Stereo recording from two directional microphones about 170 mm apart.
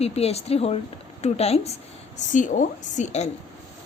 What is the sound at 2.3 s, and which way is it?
Speech, 50° left (ahead or behind).